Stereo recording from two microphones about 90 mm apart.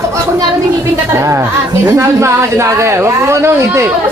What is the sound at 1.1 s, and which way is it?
Speech, 30° right (ahead or behind).